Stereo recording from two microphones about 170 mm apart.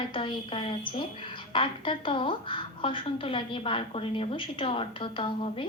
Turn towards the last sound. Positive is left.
turn(degrees=30)  # may be behind; listen again after turning